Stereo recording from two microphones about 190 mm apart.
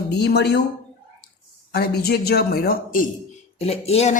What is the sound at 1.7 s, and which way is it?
A woman's voice, 55° left (ahead or behind).